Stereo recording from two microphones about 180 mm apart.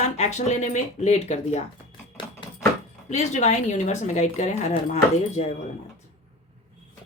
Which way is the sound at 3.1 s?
40° left (ahead or behind).